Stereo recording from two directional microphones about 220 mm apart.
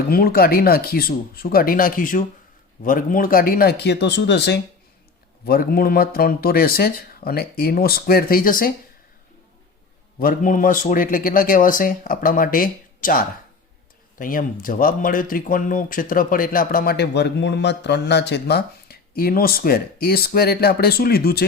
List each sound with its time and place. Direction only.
0.1 s speech: 45° left (ahead or behind)
10.2 s speech: 40° left (ahead or behind)